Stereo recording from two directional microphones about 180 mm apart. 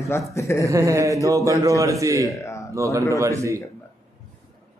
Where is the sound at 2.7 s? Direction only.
15° right (ahead or behind).